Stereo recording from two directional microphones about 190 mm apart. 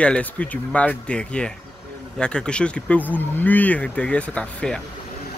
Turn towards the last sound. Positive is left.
turn(degrees=5)  # may be behind; listen again after turning